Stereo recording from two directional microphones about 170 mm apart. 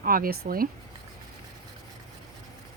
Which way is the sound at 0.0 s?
60° right (ahead or behind).